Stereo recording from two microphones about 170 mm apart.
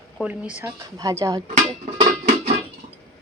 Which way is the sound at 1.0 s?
20° right (ahead or behind).